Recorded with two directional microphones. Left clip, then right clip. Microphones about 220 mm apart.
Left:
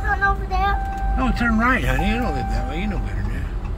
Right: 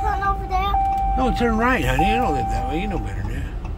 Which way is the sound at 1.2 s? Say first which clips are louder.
Right 2 dB; 30° right (ahead or behind).